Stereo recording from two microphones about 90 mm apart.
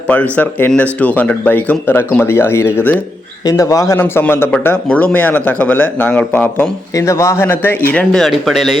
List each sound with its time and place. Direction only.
0.1 s speech: 15° left (ahead or behind)
3.4 s a man's voice: 40° left (ahead or behind)
3.9 s speech: 20° left (ahead or behind)
6.9 s speech: 35° left (ahead or behind)
8.1 s speech: centre (ahead or behind)